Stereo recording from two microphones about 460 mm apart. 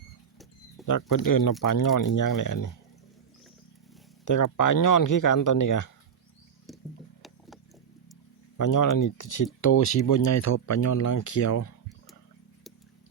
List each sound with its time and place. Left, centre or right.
0.9 s speech: left
4.3 s speech: left
7.2 s rowboat: centre
8.5 s speech: left